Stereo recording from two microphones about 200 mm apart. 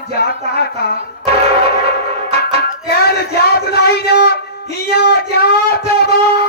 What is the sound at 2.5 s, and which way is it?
Music, 50° left (ahead or behind).